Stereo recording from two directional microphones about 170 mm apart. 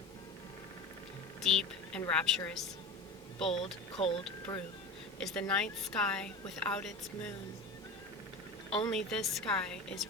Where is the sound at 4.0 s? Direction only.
35° left (ahead or behind).